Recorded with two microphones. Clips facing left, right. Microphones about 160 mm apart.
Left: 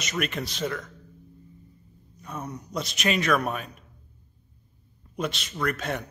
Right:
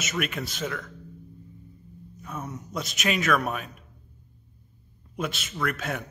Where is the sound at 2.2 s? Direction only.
Centre (ahead or behind).